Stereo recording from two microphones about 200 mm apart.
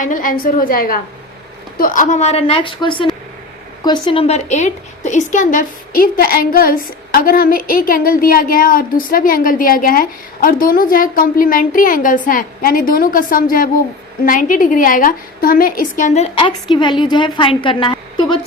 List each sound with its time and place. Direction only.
0.0 s a woman's voice: 40° left (ahead or behind); by 18.3 s 25° left (ahead or behind)